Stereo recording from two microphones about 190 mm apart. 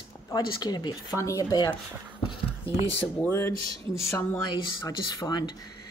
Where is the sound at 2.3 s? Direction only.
30° left (ahead or behind).